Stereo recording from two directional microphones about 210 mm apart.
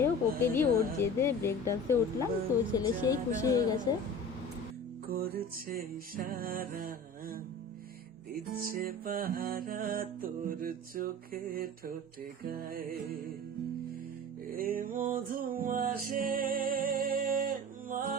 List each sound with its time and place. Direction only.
0.0 s a woman's voice: 10° left (ahead or behind)
5.0 s music: 45° right (ahead or behind)
8.6 s music: 45° right (ahead or behind)
14.4 s music: 45° right (ahead or behind)